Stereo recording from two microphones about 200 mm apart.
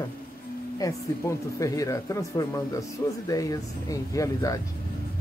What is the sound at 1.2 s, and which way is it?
Speech, 15° left (ahead or behind).